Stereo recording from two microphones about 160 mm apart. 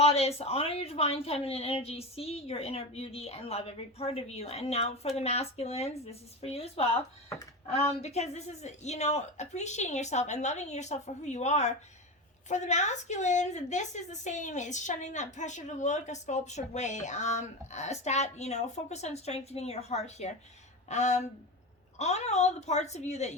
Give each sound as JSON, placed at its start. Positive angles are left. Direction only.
{"t": 0.0, "sound": "a woman's voice", "side_deg": 40}
{"t": 7.9, "sound": "a woman's voice", "side_deg": 45}